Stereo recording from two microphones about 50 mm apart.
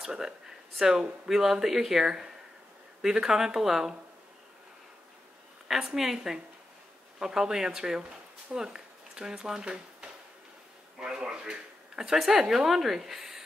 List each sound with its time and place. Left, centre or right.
0.0 s speech: centre
5.9 s speech: centre
12.2 s a woman's voice: centre